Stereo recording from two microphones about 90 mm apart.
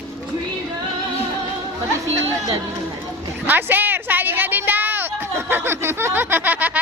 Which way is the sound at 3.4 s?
20° right (ahead or behind).